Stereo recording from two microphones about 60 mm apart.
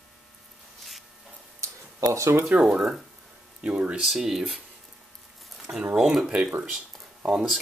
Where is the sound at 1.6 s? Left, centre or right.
Right.